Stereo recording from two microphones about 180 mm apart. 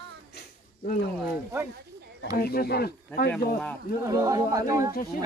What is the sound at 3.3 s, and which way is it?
Speech, 5° left (ahead or behind).